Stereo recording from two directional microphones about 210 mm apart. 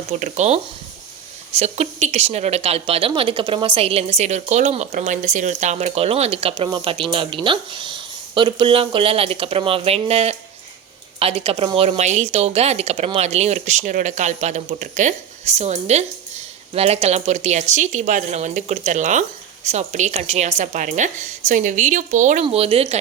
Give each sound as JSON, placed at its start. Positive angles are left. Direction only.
{"t": 0.1, "sound": "a woman's voice", "side_deg": -35}